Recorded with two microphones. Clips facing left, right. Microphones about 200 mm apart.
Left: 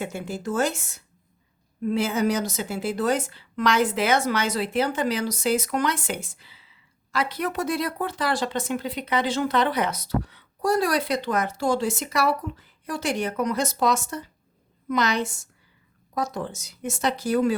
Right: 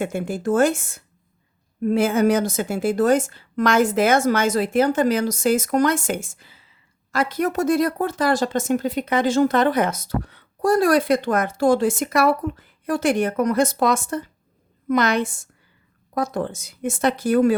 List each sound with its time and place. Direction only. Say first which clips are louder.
0.0 s speech: right 6 dB; 55° right (ahead or behind)